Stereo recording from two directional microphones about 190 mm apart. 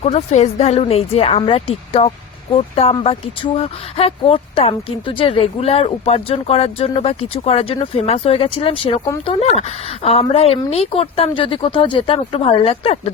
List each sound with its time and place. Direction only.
0.0 s a woman's voice: 35° left (ahead or behind)